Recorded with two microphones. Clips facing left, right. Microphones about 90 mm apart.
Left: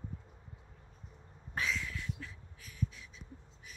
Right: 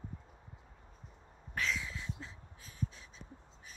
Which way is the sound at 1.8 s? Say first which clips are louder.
Left 1 dB; 25° right (ahead or behind).